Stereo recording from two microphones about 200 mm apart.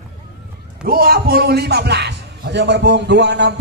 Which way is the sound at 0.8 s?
50° right (ahead or behind).